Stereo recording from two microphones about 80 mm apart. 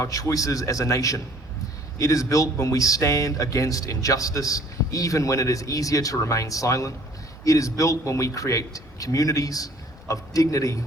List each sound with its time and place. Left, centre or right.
0.0 s speech: left